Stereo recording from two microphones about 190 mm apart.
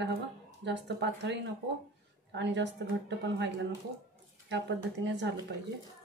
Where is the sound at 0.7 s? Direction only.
65° right (ahead or behind).